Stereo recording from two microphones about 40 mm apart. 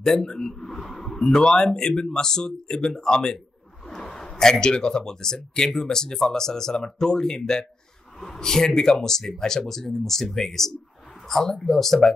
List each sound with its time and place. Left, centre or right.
0.0 s a man's voice: centre